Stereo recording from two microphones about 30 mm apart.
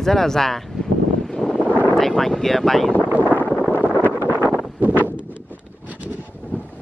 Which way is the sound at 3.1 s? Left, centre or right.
Right.